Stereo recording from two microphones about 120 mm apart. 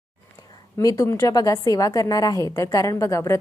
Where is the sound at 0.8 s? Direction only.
30° left (ahead or behind).